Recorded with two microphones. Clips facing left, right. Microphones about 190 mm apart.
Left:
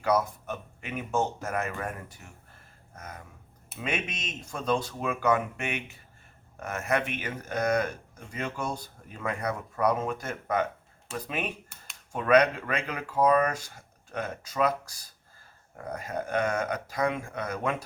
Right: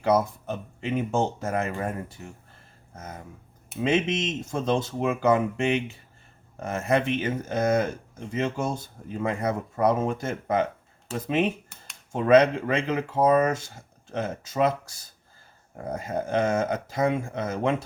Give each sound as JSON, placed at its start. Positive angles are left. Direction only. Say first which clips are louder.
{"t": 0.0, "sound": "speech", "louder": "right 4 dB", "side_deg": -25}